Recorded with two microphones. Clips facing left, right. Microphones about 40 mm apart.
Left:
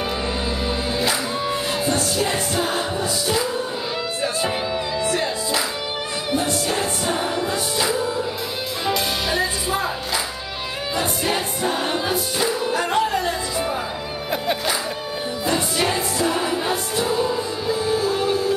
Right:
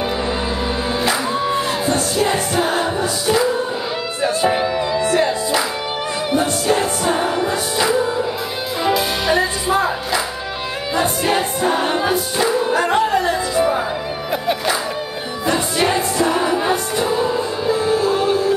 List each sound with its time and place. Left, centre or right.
0.9 s music: centre
4.7 s music: centre
6.7 s music: centre
8.8 s music: centre
9.7 s music: right
15.4 s music: centre